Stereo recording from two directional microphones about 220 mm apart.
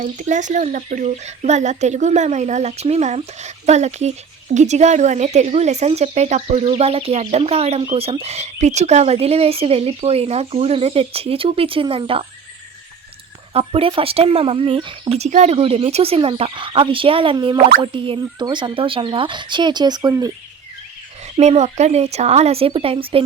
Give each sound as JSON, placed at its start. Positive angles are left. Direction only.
{"t": 0.0, "sound": "speech", "side_deg": -35}
{"t": 13.5, "sound": "speech", "side_deg": -25}
{"t": 21.3, "sound": "speech", "side_deg": -30}